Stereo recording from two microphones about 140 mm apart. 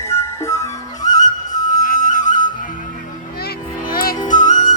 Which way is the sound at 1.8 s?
75° left (ahead or behind).